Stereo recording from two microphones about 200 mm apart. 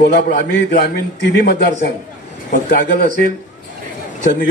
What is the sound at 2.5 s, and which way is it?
Speech, 40° left (ahead or behind).